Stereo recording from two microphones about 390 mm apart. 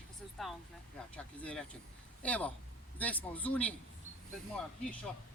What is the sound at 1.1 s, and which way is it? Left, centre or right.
Speech, centre.